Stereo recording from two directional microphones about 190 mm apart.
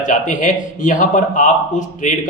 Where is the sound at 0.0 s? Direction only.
40° left (ahead or behind).